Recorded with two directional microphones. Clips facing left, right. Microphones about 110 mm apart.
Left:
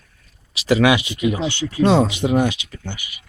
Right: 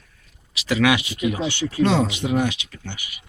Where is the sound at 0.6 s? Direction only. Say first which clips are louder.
Left 4 dB; 30° left (ahead or behind).